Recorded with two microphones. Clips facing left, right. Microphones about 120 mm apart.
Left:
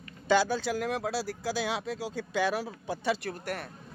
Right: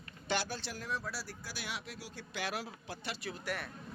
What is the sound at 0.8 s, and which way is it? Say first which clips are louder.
Speech: left 10 dB; 90° left.